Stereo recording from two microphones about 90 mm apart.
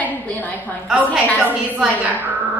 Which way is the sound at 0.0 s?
20° left (ahead or behind).